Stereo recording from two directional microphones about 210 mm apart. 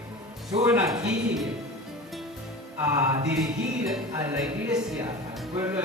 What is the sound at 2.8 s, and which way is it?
Speech, 15° right (ahead or behind).